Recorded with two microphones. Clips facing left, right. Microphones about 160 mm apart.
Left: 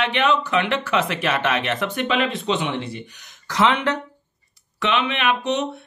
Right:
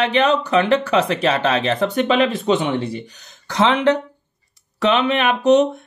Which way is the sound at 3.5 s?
30° right (ahead or behind).